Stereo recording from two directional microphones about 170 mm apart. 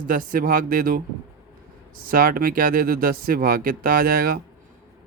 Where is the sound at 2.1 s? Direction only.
55° right (ahead or behind).